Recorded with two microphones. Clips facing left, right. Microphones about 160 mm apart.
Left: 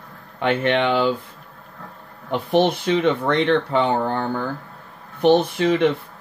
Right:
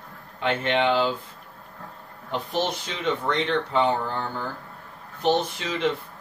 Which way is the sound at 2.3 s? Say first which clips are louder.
Left 8 dB; 65° left (ahead or behind).